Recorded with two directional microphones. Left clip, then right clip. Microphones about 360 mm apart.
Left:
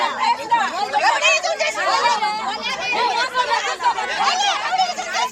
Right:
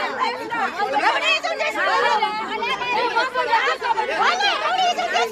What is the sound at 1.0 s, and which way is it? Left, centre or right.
Chatter, centre.